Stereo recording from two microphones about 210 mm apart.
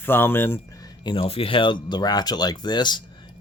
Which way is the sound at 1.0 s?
25° left (ahead or behind).